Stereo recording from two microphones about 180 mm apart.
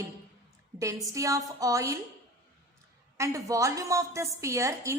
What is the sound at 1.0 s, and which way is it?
Speech, 15° right (ahead or behind).